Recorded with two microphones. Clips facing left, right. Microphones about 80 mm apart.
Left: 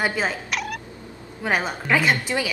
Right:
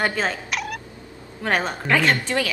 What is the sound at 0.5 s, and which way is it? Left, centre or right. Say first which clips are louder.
Cat: even; centre.